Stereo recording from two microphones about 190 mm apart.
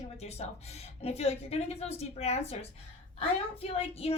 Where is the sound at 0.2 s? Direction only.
35° left (ahead or behind).